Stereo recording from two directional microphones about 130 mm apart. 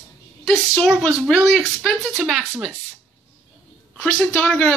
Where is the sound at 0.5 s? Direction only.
5° left (ahead or behind).